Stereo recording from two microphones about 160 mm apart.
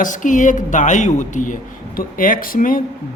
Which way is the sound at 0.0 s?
55° left (ahead or behind).